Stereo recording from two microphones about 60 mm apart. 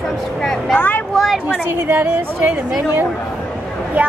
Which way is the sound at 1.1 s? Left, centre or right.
Centre.